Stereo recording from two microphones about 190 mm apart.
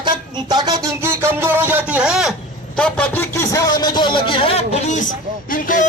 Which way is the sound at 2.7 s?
5° left (ahead or behind).